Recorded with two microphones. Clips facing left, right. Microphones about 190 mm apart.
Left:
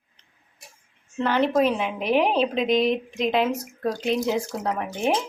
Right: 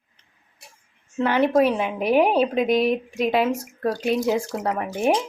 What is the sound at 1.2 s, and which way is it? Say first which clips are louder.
Speech: right 2 dB; 10° right (ahead or behind).